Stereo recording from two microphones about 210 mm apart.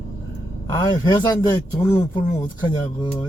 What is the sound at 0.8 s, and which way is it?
Speech, 20° left (ahead or behind).